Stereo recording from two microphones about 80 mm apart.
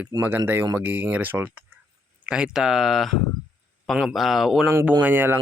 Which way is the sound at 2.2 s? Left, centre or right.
Centre.